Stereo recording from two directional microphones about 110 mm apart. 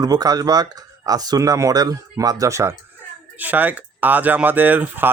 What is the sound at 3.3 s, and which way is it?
Speech, 15° right (ahead or behind).